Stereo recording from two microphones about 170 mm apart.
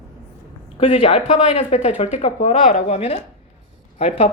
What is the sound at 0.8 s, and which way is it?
Speech, 40° left (ahead or behind).